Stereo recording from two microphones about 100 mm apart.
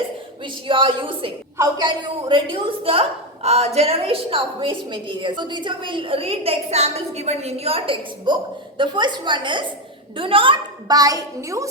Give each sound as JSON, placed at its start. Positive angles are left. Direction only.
{"t": 0.4, "sound": "a woman's voice", "side_deg": -60}
{"t": 8.3, "sound": "a woman's voice", "side_deg": -50}
{"t": 10.8, "sound": "a woman's voice", "side_deg": -40}